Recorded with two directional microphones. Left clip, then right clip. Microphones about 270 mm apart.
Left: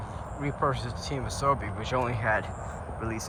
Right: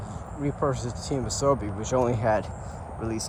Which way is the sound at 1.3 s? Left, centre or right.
Right.